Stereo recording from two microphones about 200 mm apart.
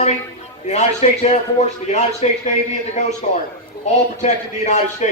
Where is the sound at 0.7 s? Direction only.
35° left (ahead or behind).